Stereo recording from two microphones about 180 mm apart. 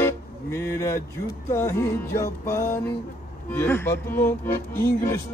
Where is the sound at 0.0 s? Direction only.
15° left (ahead or behind).